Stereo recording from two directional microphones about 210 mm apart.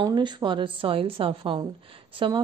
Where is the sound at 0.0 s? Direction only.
20° right (ahead or behind).